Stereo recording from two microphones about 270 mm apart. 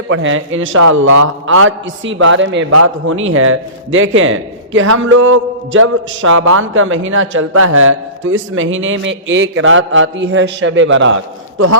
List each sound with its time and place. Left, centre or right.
0.1 s a man's voice: right
0.8 s a man's voice: right